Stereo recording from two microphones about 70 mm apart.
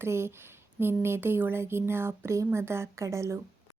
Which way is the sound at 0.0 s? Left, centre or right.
Right.